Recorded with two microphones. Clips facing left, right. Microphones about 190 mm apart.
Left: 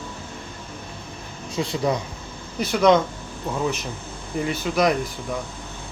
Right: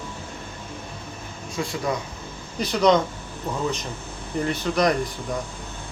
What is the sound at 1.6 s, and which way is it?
Speech, 20° left (ahead or behind).